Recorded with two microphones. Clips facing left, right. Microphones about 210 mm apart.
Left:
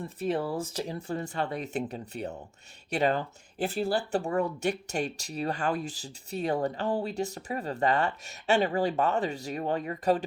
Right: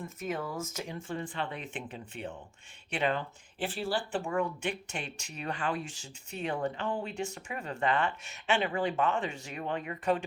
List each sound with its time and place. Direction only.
0.0 s speech: 35° left (ahead or behind)